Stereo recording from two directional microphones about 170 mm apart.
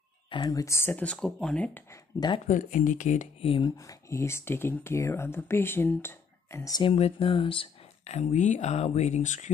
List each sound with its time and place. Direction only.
0.3 s speech: 25° left (ahead or behind); by 2.0 s 10° left (ahead or behind)
2.1 s speech: 25° left (ahead or behind)
2.4 s speech: 50° left (ahead or behind); by 3.7 s 35° left (ahead or behind)
3.7 s speech: 15° left (ahead or behind)
6.8 s speech: 35° left (ahead or behind)